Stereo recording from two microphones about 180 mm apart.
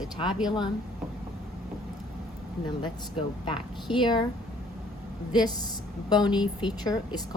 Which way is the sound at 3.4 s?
25° left (ahead or behind).